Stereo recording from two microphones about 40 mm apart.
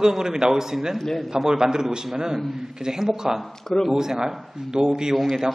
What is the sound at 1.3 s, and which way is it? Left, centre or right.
A man's voice, centre.